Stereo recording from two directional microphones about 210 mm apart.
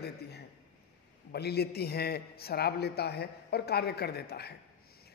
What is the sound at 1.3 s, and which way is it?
A woman's voice, 50° left (ahead or behind).